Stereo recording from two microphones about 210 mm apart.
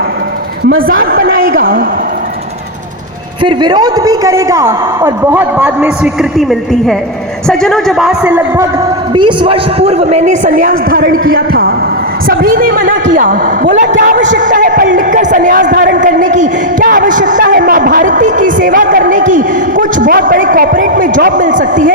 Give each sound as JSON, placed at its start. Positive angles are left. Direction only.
{"t": 0.8, "sound": "a man's voice", "side_deg": -45}
{"t": 3.4, "sound": "a man's voice", "side_deg": -20}
{"t": 9.1, "sound": "a man's voice", "side_deg": -25}